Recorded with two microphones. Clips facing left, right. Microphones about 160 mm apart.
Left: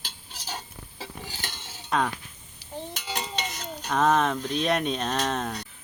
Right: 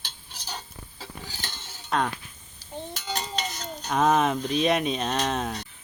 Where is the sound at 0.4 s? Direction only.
5° left (ahead or behind).